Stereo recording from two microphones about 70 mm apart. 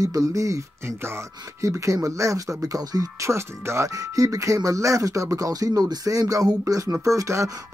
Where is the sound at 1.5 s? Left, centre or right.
Right.